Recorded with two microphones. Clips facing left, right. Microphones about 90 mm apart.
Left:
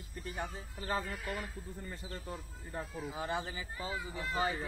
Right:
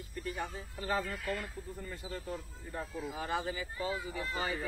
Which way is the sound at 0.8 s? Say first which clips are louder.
Right 2 dB; 30° left (ahead or behind).